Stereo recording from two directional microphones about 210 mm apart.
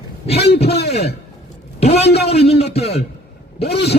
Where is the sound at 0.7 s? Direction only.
50° left (ahead or behind).